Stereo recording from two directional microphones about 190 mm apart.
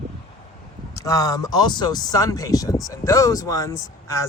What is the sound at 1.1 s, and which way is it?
Speech, 20° left (ahead or behind).